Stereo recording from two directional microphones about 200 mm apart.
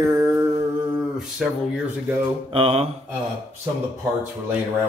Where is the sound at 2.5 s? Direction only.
30° right (ahead or behind).